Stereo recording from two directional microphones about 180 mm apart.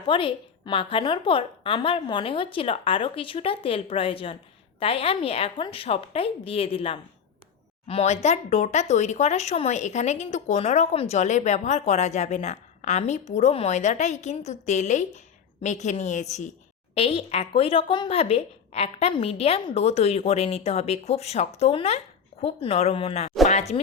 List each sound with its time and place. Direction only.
0.1 s a woman's voice: 30° left (ahead or behind)